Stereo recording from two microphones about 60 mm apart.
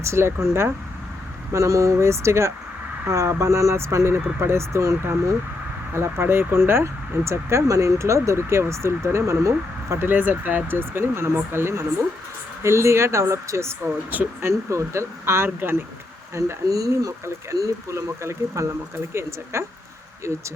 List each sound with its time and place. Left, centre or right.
0.0 s speech: right
1.5 s speech: right
10.1 s speech: right
16.3 s speech: right